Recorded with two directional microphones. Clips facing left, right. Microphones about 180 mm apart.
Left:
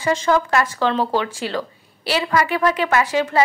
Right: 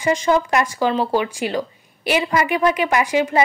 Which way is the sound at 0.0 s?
15° right (ahead or behind).